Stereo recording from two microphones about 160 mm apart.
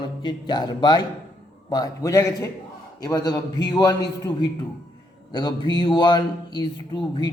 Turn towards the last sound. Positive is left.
turn(degrees=25)  # may be behind; listen again after turning